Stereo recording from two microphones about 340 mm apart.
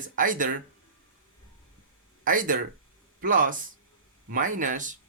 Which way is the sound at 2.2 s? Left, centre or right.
Right.